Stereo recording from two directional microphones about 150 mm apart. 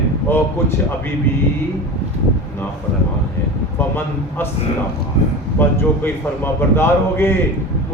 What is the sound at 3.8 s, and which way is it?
Speech, 15° left (ahead or behind).